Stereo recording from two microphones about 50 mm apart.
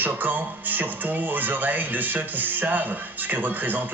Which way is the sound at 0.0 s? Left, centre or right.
Right.